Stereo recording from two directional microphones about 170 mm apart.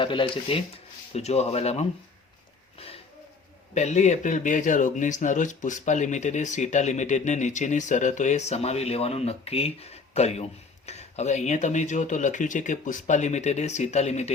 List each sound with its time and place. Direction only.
0.0 s speech: 30° left (ahead or behind)
2.7 s a sound: 35° left (ahead or behind)
3.8 s speech: 45° left (ahead or behind)